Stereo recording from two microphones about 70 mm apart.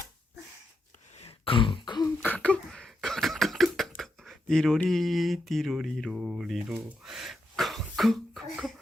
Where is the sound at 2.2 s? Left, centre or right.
Left.